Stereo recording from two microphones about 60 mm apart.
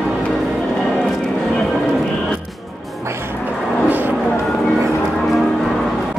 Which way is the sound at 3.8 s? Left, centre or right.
Right.